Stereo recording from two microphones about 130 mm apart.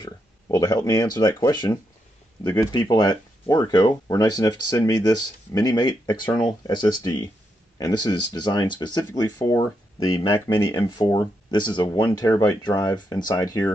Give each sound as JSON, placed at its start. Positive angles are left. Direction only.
{"t": 0.0, "sound": "speech", "side_deg": 30}